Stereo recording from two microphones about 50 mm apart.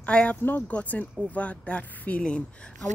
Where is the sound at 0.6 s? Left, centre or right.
Left.